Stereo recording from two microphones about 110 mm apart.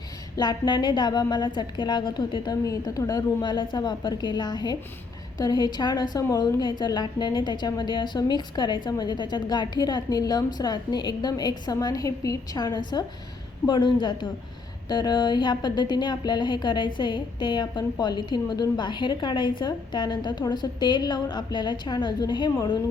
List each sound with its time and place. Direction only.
0.3 s a woman's voice: 40° left (ahead or behind)